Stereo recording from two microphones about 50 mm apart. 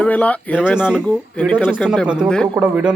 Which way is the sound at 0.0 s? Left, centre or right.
Left.